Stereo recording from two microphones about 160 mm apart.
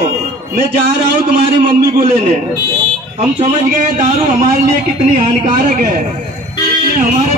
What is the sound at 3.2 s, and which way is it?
A man's voice, 45° right (ahead or behind).